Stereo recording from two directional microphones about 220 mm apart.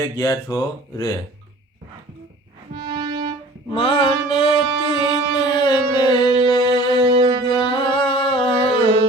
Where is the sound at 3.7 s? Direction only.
25° left (ahead or behind).